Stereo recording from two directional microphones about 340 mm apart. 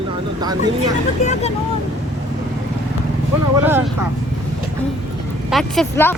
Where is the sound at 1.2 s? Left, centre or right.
Left.